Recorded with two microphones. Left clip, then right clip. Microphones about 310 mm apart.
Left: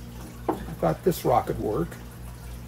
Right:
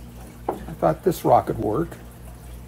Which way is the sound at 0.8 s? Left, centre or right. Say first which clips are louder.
Right 5 dB; centre.